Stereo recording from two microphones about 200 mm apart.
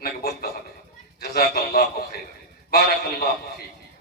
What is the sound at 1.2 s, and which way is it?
A man's voice, 50° left (ahead or behind).